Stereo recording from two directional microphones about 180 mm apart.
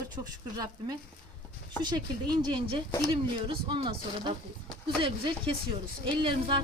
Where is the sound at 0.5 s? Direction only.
20° right (ahead or behind).